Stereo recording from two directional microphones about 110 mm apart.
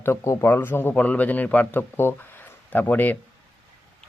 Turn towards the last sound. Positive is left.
turn(degrees=15)  # may be behind; listen again after turning